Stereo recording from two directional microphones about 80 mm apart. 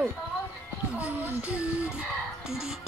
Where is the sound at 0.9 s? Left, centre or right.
Centre.